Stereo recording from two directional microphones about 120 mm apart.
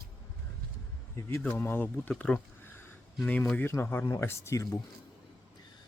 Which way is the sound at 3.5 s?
15° left (ahead or behind).